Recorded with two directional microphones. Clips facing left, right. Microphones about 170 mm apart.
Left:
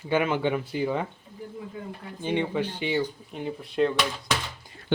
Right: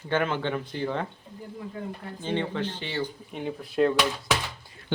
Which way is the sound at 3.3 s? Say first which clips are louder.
Even; centre (ahead or behind).